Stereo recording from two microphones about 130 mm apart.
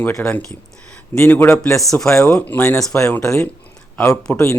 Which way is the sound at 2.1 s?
20° left (ahead or behind).